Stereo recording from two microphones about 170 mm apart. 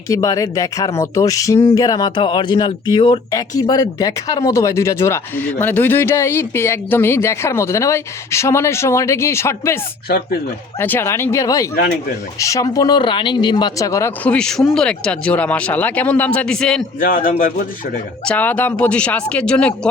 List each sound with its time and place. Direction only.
0.1 s speech: 20° left (ahead or behind)
10.8 s speech: 10° left (ahead or behind)
17.0 s a man's voice: 55° left (ahead or behind)
18.3 s speech: 10° left (ahead or behind)